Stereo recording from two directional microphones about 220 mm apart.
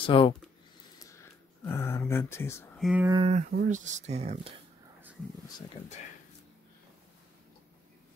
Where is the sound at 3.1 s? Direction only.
25° right (ahead or behind).